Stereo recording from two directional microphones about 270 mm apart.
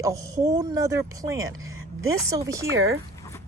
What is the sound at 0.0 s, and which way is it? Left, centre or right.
A woman's voice, centre.